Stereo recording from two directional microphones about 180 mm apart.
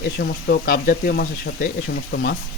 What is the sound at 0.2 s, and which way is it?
Speech, 60° left (ahead or behind).